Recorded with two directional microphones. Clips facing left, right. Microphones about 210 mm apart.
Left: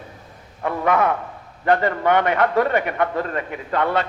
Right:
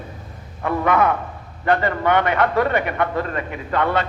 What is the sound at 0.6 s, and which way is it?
A man's voice, 40° left (ahead or behind).